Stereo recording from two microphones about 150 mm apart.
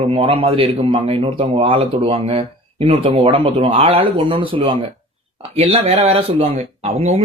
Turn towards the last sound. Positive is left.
turn(degrees=-45)  # may be behind; listen again after turning